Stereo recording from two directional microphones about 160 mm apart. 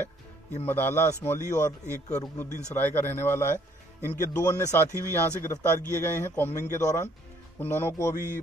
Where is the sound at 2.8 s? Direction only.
15° left (ahead or behind).